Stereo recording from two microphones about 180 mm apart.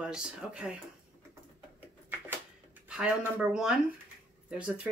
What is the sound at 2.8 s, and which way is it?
Speech, 5° right (ahead or behind).